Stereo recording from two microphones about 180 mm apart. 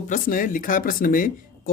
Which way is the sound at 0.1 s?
50° left (ahead or behind).